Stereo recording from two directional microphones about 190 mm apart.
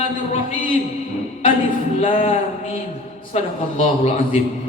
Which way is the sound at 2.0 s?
30° left (ahead or behind).